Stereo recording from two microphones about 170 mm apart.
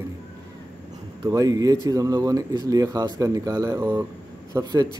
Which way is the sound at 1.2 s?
20° right (ahead or behind).